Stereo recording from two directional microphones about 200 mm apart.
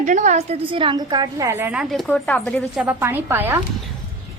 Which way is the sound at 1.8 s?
Centre (ahead or behind).